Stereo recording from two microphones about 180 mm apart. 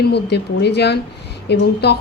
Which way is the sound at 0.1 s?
65° left (ahead or behind).